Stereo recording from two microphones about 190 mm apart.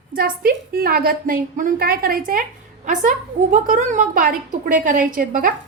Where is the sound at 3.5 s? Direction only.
45° right (ahead or behind).